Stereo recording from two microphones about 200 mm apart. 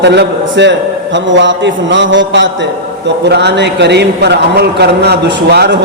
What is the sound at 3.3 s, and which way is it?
A man's voice, 60° right (ahead or behind).